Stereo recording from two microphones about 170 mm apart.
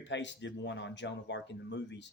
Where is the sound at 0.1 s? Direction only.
90° left.